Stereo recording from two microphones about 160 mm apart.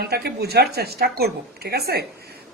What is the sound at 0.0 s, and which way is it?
A woman's voice, 85° right.